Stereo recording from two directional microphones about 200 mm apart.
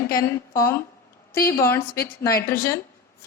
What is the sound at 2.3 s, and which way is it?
Speech, 50° left (ahead or behind).